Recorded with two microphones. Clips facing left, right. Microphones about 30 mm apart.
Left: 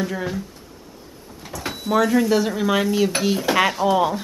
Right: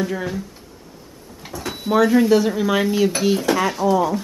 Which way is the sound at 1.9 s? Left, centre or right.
Centre.